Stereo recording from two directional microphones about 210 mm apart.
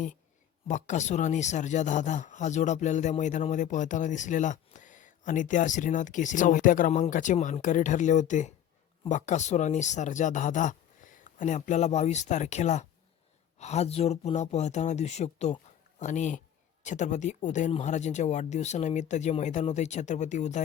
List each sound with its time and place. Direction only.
0.7 s speech: 35° left (ahead or behind)